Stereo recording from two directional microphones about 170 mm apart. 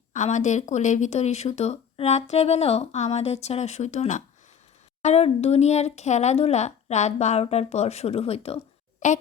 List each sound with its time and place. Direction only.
0.1 s speech: 45° left (ahead or behind)